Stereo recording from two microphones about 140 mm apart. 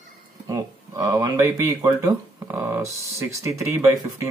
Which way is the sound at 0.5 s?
25° right (ahead or behind).